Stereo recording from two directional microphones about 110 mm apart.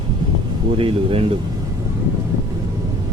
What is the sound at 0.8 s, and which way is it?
Speech, 55° right (ahead or behind).